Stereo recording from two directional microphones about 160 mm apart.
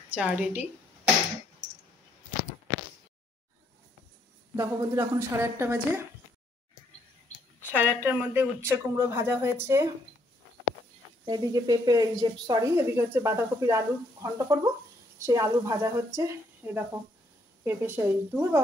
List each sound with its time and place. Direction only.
0.1 s a woman's voice: 5° right (ahead or behind)
4.6 s speech: 20° right (ahead or behind)
7.7 s speech: 10° right (ahead or behind)
11.2 s a woman's voice: 25° right (ahead or behind)